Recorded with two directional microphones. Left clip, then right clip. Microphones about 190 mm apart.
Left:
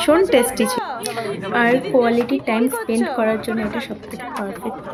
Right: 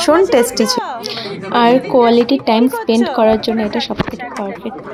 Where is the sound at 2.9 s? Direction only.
10° right (ahead or behind).